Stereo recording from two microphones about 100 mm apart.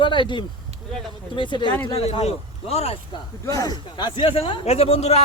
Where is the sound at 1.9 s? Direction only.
85° left.